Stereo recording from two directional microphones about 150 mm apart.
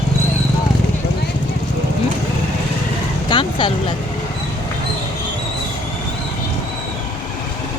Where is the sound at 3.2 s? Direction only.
35° left (ahead or behind).